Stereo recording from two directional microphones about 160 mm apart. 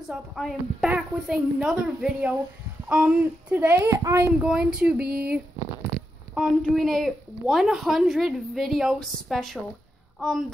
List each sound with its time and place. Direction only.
0.1 s a woman's voice: centre (ahead or behind); by 4.3 s 20° right (ahead or behind)
4.4 s a woman's voice: 5° right (ahead or behind)
5.0 s speech: 75° right (ahead or behind)
5.9 s a sound: 5° right (ahead or behind)
6.3 s a woman's voice: centre (ahead or behind)